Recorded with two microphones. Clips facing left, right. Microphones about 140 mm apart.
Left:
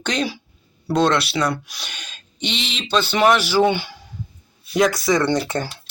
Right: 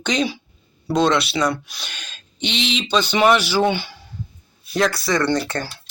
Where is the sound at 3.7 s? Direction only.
10° left (ahead or behind).